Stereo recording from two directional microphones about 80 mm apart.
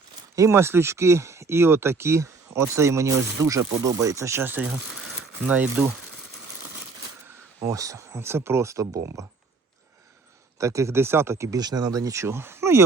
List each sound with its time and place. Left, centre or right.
0.3 s speech: right
5.4 s speech: centre
7.6 s speech: right
10.6 s speech: right
11.6 s speech: right